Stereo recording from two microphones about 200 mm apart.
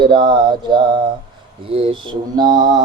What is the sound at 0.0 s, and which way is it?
Female singing, 25° right (ahead or behind).